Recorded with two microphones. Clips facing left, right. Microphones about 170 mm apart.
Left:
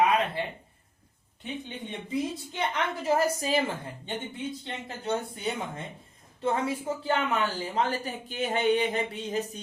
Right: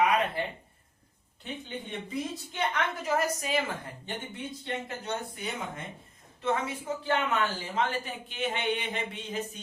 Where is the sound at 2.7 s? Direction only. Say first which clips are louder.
Left 4 dB; 30° left (ahead or behind).